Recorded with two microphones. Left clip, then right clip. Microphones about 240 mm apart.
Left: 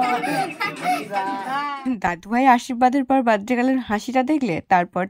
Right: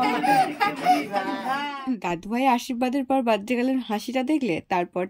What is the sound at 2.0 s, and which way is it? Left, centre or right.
Speech, left.